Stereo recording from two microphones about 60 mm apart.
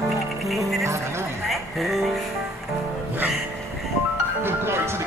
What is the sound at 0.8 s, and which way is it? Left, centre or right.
Music, right.